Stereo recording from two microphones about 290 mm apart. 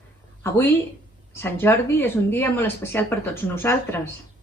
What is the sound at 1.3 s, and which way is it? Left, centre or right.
Speech, centre.